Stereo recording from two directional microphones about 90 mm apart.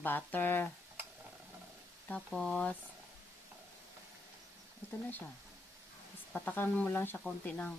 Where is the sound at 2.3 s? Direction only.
10° left (ahead or behind).